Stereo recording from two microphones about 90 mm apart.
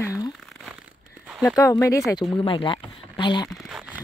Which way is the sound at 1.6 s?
35° left (ahead or behind).